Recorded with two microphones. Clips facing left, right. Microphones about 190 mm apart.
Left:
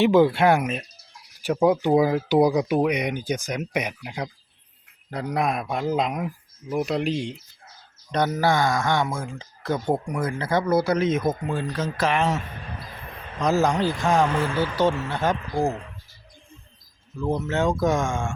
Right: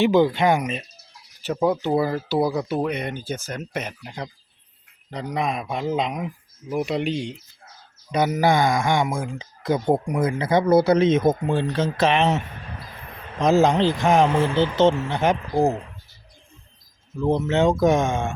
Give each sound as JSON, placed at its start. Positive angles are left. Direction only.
{"t": 0.0, "sound": "speech", "side_deg": 0}
{"t": 8.1, "sound": "speech", "side_deg": -10}
{"t": 13.4, "sound": "speech", "side_deg": -25}
{"t": 17.2, "sound": "speech", "side_deg": -20}